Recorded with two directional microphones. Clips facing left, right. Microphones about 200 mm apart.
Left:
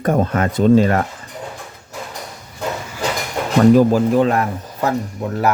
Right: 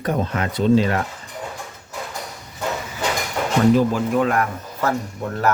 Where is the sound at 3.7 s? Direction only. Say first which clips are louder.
Left 5 dB; 45° left (ahead or behind).